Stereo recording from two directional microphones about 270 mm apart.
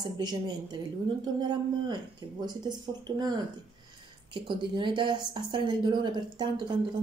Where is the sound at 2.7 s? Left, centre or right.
Centre.